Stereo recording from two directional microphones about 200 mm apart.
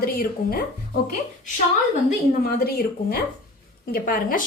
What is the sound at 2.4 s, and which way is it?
A woman's voice, 50° left (ahead or behind).